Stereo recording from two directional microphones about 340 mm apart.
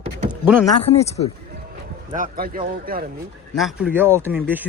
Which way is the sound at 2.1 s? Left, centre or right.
Right.